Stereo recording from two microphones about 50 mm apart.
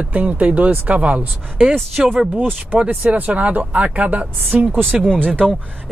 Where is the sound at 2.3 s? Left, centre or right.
Right.